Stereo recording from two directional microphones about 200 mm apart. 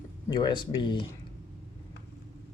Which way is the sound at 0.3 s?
20° left (ahead or behind).